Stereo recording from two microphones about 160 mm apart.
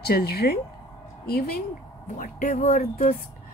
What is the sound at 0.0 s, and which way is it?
A woman's voice, 75° left (ahead or behind).